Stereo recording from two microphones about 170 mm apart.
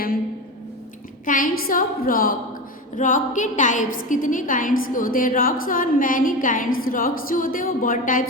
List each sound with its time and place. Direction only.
1.2 s a woman's voice: 55° left (ahead or behind)